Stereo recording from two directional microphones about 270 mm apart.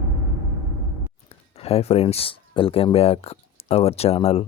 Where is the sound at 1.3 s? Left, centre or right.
Left.